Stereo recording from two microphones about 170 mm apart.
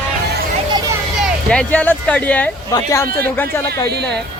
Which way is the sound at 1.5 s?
5° left (ahead or behind).